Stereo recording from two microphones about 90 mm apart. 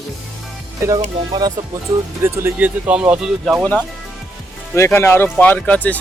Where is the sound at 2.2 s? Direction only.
30° right (ahead or behind).